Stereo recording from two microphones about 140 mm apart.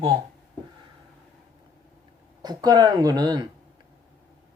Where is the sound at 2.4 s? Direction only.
30° right (ahead or behind).